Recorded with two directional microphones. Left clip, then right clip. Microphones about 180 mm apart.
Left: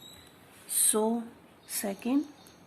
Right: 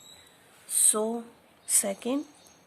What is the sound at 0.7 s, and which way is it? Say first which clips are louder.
Speech: right 1 dB; 50° right (ahead or behind).